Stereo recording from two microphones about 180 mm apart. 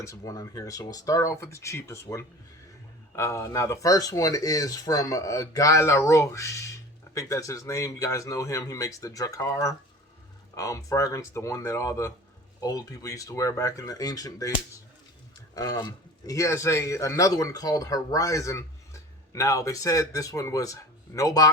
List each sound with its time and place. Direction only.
0.0 s speech: 15° left (ahead or behind)
15.5 s speech: 20° left (ahead or behind)